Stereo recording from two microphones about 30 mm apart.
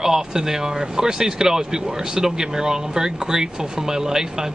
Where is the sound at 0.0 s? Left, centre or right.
Centre.